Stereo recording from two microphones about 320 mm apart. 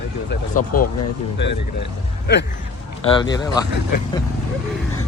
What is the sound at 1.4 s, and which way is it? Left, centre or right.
Speech, left.